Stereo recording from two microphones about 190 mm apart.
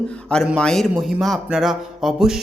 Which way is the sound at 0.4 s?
5° left (ahead or behind).